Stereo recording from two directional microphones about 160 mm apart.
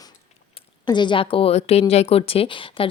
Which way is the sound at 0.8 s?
30° left (ahead or behind).